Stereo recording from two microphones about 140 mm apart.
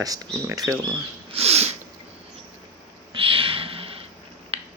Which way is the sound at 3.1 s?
40° right (ahead or behind).